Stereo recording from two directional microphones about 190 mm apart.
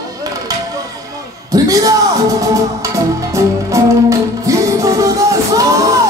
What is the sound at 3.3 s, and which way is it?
Music, 15° right (ahead or behind).